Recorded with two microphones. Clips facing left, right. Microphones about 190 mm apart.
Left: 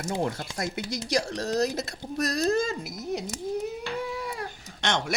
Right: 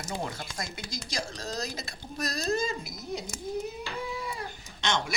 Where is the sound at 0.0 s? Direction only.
55° left (ahead or behind).